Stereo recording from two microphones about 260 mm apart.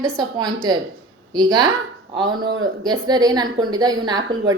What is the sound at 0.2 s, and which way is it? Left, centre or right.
A woman's voice, centre.